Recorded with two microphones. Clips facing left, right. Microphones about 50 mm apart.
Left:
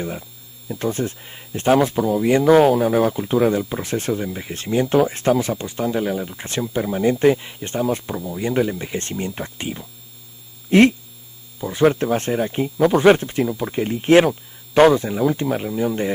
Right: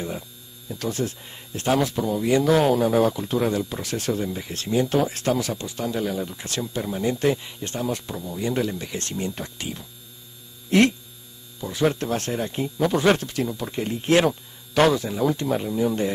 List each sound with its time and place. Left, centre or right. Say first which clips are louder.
0.7 s speech: left 4 dB; left
2.0 s speech: left 5 dB; centre
2.2 s speech: left 5 dB; left
2.6 s speech: left 3 dB; centre
3.1 s speech: left 5 dB; left
14.2 s speech: left 2 dB; centre